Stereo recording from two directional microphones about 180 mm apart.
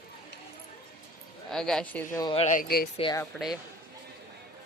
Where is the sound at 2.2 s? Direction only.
25° left (ahead or behind).